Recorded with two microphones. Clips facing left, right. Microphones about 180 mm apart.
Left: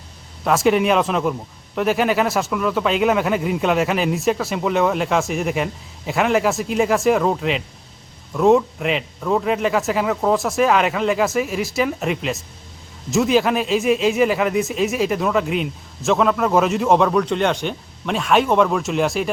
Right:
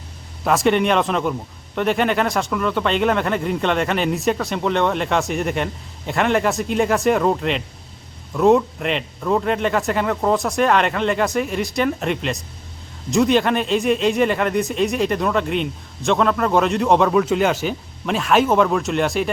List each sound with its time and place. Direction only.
0.4 s speech: centre (ahead or behind)